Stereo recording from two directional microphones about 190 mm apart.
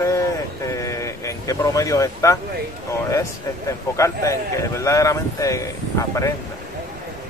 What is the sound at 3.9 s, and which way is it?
Speech, 15° left (ahead or behind).